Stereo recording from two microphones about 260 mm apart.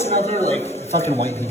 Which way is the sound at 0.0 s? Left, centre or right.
Left.